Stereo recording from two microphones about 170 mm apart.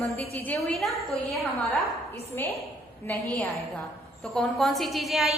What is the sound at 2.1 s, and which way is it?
A woman's voice, 15° left (ahead or behind).